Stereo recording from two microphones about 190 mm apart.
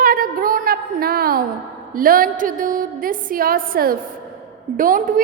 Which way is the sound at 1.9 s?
45° right (ahead or behind).